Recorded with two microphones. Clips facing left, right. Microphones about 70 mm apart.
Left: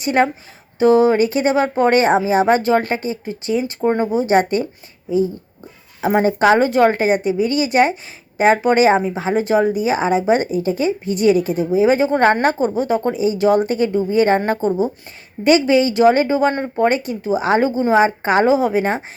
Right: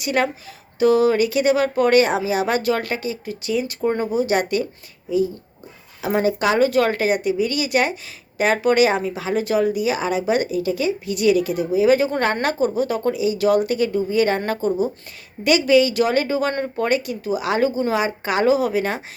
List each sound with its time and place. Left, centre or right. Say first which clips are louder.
0.0 s speech: left 5 dB; left
6.0 s speech: left 5 dB; left